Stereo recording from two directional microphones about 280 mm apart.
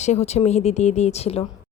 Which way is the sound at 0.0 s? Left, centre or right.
Left.